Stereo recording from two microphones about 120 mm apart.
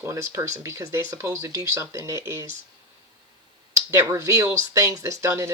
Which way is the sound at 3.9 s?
25° right (ahead or behind).